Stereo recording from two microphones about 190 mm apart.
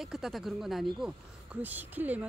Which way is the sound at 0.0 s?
Centre (ahead or behind).